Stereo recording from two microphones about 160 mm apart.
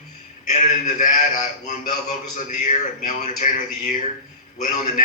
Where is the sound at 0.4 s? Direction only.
50° left (ahead or behind).